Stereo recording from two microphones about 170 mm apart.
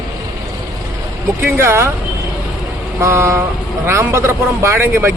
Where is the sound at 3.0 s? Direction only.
15° right (ahead or behind).